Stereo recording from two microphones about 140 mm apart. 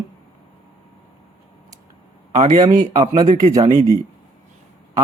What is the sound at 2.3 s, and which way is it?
Speech, 55° right (ahead or behind).